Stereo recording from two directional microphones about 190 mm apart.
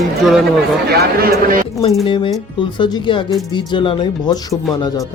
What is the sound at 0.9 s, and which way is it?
Speech, 55° right (ahead or behind).